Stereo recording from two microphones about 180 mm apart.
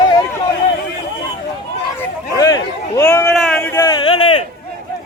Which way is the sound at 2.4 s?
20° left (ahead or behind).